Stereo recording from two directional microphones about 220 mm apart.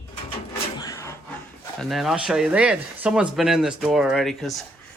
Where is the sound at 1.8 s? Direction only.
Centre (ahead or behind).